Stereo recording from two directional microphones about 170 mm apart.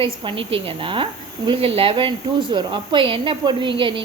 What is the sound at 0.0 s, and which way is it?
A woman's voice, 30° right (ahead or behind).